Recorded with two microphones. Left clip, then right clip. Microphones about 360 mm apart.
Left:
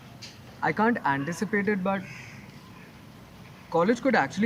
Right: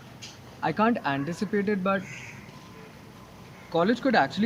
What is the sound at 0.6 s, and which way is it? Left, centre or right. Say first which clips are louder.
Speech: left 1 dB; centre.